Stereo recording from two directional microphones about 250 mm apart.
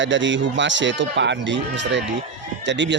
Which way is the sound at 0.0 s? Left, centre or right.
Right.